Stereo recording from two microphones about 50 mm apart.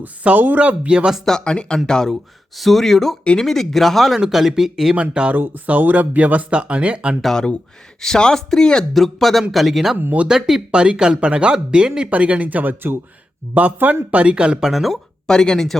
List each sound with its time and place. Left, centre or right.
0.0 s speech: right
1.2 s speech: centre
5.3 s speech: right
7.3 s speech: centre
10.0 s speech: right
10.2 s speech: centre; by 14.0 s right
14.1 s speech: right
14.7 s speech: centre
15.3 s speech: centre